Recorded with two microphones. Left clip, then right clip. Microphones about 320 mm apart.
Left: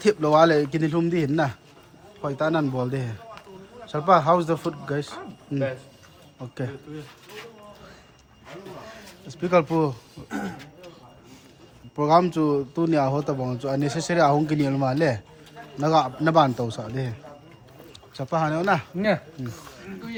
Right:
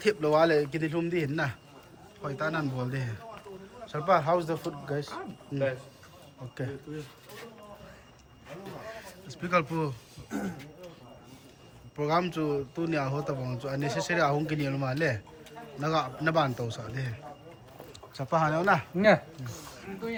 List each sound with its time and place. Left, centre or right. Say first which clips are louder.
0.0 s speech: left 6 dB; centre
9.0 s speech: left 8 dB; centre
11.9 s speech: left 9 dB; centre